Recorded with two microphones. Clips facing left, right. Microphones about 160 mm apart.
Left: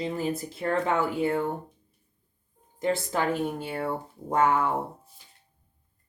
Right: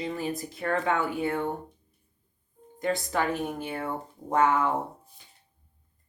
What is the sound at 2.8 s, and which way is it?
Speech, 25° left (ahead or behind).